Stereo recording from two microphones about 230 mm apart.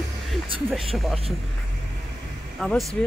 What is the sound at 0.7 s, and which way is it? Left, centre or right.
Speech, centre.